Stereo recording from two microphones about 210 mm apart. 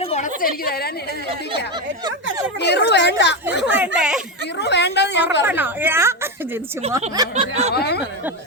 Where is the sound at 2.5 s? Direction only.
50° left (ahead or behind).